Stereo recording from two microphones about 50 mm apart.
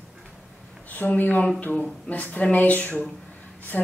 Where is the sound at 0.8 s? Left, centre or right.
Left.